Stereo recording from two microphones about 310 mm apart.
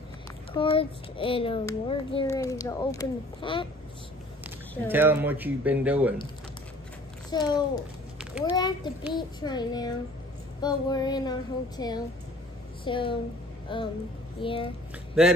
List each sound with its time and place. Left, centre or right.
0.5 s a child's voice: centre
4.8 s speech: centre
7.2 s a child's voice: centre
8.2 s a sound: centre
8.5 s a child's voice: centre